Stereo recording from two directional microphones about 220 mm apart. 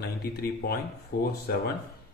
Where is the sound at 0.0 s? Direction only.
45° left (ahead or behind).